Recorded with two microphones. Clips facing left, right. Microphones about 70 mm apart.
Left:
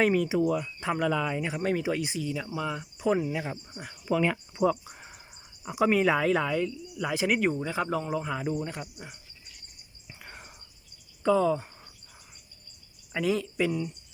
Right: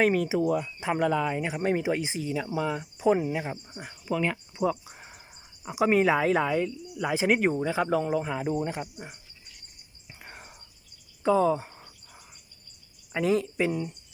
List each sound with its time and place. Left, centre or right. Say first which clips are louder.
0.0 s speech: even; centre
4.0 s speech: left 2 dB; centre
5.6 s speech: right 1 dB; centre
7.7 s speech: right 4 dB; centre
8.0 s speech: right 3 dB; right
10.1 s whispering: even; centre
11.3 s a sound: right 1 dB; right
13.1 s speech: right 2 dB; right